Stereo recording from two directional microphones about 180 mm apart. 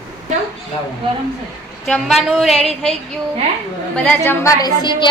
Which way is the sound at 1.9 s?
Centre (ahead or behind).